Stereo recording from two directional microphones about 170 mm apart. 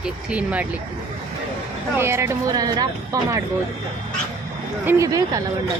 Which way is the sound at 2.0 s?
15° right (ahead or behind).